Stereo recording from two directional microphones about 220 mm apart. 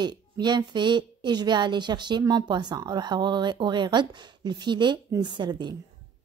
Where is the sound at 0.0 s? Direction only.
20° right (ahead or behind).